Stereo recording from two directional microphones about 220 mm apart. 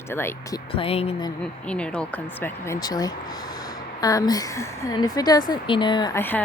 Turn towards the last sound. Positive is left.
turn(degrees=10)  # may be behind; listen again after turning